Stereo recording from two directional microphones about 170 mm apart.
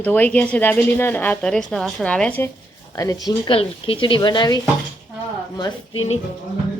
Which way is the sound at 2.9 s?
20° left (ahead or behind).